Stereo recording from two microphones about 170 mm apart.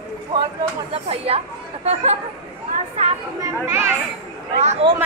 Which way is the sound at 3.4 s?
15° right (ahead or behind).